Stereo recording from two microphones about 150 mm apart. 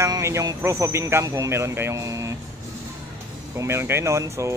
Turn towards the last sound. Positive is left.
turn(degrees=-20)  # may be behind; listen again after turning